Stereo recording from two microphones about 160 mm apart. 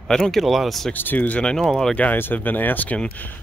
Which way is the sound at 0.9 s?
10° left (ahead or behind).